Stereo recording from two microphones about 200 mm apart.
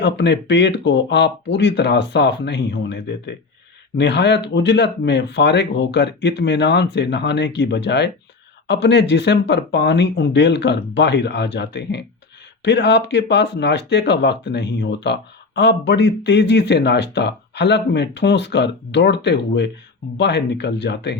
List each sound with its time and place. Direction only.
0.0 s speech: 60° left (ahead or behind)